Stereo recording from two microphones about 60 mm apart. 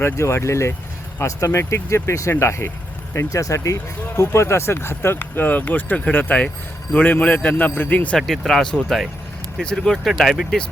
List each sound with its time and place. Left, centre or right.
0.0 s speech: left
3.2 s speech: left
4.2 s a man's voice: left
8.3 s speech: centre